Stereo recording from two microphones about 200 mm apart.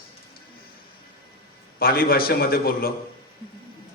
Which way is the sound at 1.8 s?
50° left (ahead or behind).